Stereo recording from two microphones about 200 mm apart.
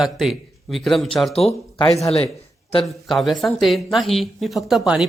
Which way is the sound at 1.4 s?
30° left (ahead or behind).